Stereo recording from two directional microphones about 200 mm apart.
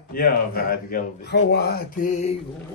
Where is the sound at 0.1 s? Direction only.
45° left (ahead or behind).